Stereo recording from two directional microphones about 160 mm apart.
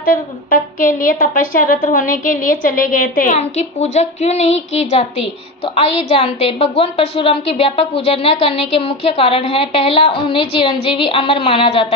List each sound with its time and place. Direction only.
0.0 s speech: 65° left (ahead or behind)
3.3 s a woman's voice: 40° left (ahead or behind)